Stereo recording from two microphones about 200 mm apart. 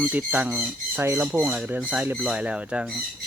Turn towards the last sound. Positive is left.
turn(degrees=-5)  # may be behind; listen again after turning